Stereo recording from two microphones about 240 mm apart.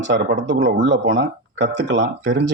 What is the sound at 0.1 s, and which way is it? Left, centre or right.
Speech, right.